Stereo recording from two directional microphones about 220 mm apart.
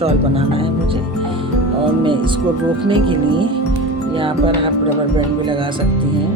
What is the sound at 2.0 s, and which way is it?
Speech, 20° right (ahead or behind).